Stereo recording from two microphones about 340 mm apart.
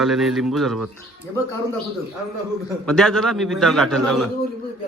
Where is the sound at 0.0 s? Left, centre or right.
Centre.